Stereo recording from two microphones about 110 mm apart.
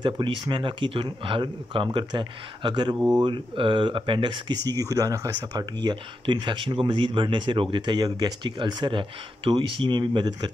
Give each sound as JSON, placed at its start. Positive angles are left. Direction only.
{"t": 0.5, "sound": "speech", "side_deg": -50}